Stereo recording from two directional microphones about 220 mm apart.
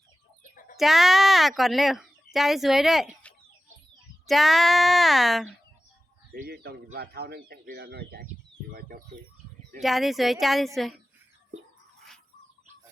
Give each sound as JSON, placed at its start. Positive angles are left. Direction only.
{"t": 0.8, "sound": "speech", "side_deg": 0}
{"t": 6.3, "sound": "speech", "side_deg": -45}
{"t": 9.8, "sound": "speech", "side_deg": 0}